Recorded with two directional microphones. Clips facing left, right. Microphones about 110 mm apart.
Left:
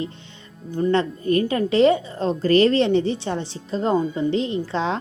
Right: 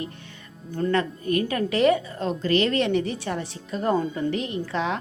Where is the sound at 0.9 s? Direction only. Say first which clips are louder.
Left 4 dB; 30° left (ahead or behind).